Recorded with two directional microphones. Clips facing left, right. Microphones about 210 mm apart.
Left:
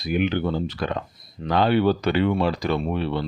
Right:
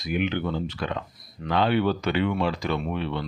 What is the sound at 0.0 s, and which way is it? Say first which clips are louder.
Speech: left 4 dB; 35° left (ahead or behind).